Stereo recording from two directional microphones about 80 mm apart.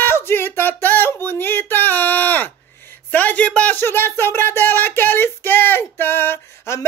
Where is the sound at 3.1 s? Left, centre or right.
Centre.